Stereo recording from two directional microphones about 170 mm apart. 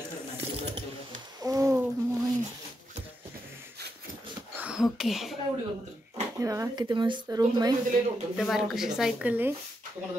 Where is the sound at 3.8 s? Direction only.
70° right (ahead or behind).